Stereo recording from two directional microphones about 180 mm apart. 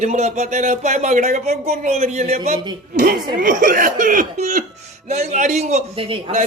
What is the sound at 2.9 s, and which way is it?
Speech, 50° right (ahead or behind).